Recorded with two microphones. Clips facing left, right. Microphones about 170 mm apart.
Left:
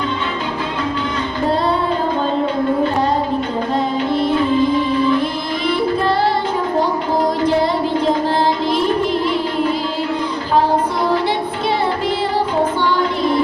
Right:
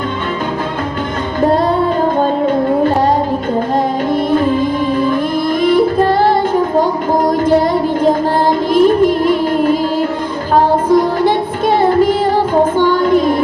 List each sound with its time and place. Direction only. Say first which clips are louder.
4.1 s music: right 3 dB; 50° right (ahead or behind)
8.7 s music: right 7 dB; 50° right (ahead or behind)
12.8 s child singing: right 6 dB; 50° right (ahead or behind)